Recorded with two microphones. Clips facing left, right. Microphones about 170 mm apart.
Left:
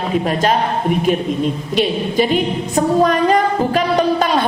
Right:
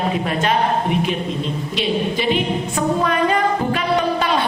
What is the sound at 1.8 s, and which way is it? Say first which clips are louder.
Singing: left 4 dB; 45° left (ahead or behind).